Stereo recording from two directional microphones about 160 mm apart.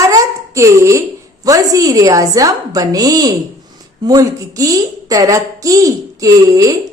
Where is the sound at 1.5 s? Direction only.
20° right (ahead or behind).